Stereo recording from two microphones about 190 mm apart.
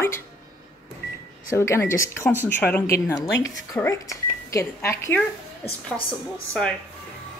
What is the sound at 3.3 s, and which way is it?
Speech, 75° left (ahead or behind).